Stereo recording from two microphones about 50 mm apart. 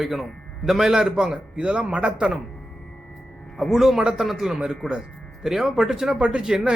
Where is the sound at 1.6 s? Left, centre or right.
Centre.